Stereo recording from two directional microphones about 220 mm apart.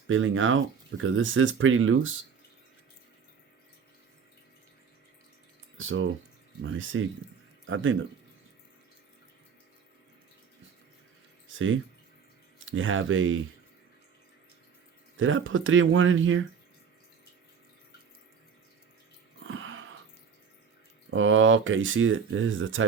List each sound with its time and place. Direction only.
0.1 s speech: 60° right (ahead or behind)
5.7 s speech: 60° right (ahead or behind)
11.4 s drip: 60° right (ahead or behind)
12.5 s speech: 60° right (ahead or behind)
15.2 s speech: 60° right (ahead or behind)
19.5 s a sound: 60° right (ahead or behind)
21.1 s speech: 60° right (ahead or behind)